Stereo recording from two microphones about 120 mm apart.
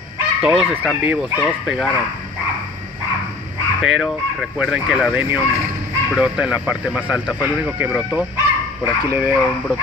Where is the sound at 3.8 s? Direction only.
5° right (ahead or behind).